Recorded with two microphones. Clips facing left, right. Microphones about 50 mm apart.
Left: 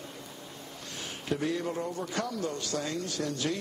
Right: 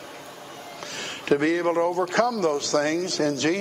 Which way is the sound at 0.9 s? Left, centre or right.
Right.